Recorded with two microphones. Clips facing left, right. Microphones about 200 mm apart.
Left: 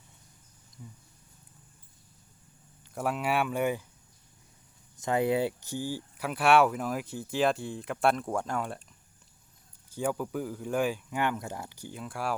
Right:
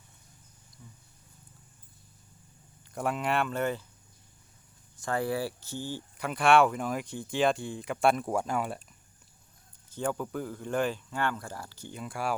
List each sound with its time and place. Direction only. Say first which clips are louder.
0.8 s speech: left 5 dB; 15° left (ahead or behind)
2.9 s speech: even; 5° left (ahead or behind)
4.9 s speech: left 4 dB; 20° left (ahead or behind); by 8.8 s 5° right (ahead or behind)
9.9 s speech: left 1 dB; 10° left (ahead or behind)
11.9 s speech: right 1 dB; centre (ahead or behind)